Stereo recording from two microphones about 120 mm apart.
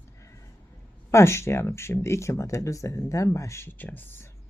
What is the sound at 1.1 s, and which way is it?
Speech, 25° left (ahead or behind).